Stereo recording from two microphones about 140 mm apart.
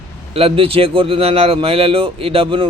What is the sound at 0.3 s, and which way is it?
Speech, 40° right (ahead or behind).